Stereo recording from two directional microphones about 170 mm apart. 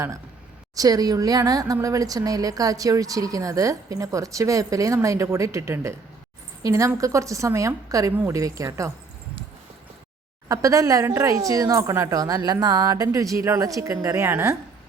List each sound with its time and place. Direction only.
0.8 s speech: 20° right (ahead or behind)
10.5 s speech: 20° right (ahead or behind)